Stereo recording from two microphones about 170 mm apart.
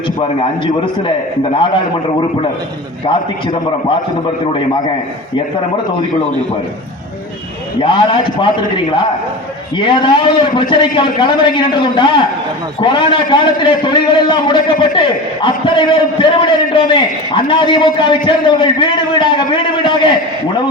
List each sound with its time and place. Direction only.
1.5 s a man's voice: 30° left (ahead or behind)
7.8 s a man's voice: 30° left (ahead or behind)